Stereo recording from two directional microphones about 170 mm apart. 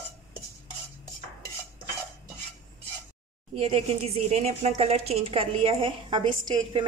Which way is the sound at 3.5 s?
30° right (ahead or behind).